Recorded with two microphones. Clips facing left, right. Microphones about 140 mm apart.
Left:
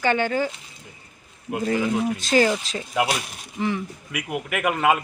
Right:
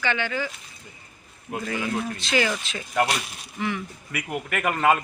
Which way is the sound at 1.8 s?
10° left (ahead or behind).